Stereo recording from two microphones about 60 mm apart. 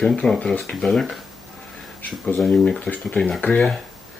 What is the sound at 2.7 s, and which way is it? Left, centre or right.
Speech, centre.